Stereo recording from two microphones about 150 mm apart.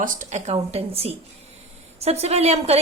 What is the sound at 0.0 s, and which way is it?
A woman's voice, 60° right (ahead or behind).